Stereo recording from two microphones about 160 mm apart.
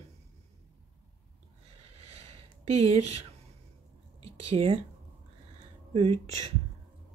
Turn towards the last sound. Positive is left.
turn(degrees=-45)  # may be behind; listen again after turning